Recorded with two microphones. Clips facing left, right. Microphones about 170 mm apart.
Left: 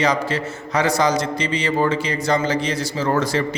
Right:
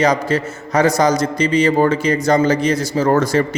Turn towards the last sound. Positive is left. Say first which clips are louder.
# right 5 dB
turn(degrees=-45)  # may be behind; listen again after turning